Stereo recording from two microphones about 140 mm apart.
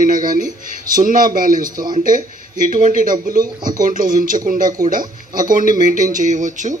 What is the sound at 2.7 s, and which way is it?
Speech, 70° right (ahead or behind).